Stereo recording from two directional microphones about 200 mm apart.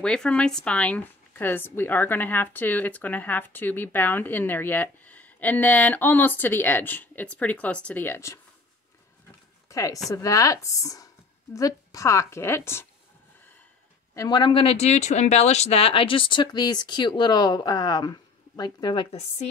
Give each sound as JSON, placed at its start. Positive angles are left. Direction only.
{"t": 0.0, "sound": "speech", "side_deg": 5}
{"t": 9.7, "sound": "a sound", "side_deg": 15}
{"t": 10.1, "sound": "speech", "side_deg": 15}
{"t": 14.1, "sound": "speech", "side_deg": 20}
{"t": 19.1, "sound": "a woman's voice", "side_deg": 35}